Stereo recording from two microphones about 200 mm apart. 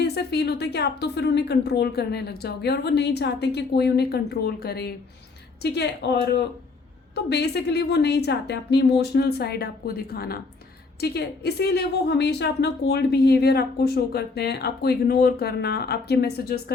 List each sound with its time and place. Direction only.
0.0 s a woman's voice: 55° left (ahead or behind)